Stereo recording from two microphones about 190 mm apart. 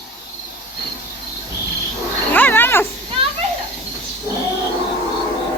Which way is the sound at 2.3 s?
10° left (ahead or behind).